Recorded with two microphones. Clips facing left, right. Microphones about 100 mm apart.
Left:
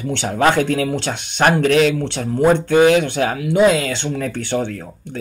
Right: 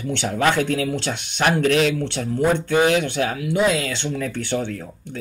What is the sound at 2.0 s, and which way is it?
Speech, 30° left (ahead or behind).